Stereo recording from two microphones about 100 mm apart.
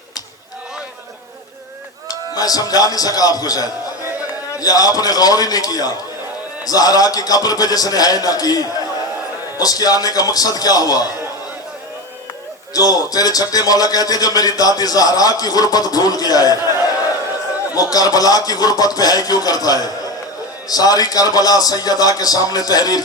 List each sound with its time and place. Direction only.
2.0 s a man's voice: 40° left (ahead or behind)
12.7 s a man's voice: 40° left (ahead or behind)
17.7 s a man's voice: 40° left (ahead or behind)